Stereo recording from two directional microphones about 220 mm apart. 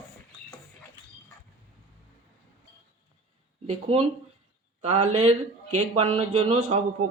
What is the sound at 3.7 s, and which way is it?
A man's voice, 25° right (ahead or behind).